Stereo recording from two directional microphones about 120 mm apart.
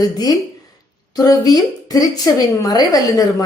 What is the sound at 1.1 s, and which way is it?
A woman's voice, 30° left (ahead or behind).